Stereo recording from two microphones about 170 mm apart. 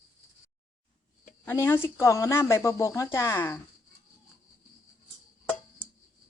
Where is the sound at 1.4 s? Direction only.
15° left (ahead or behind).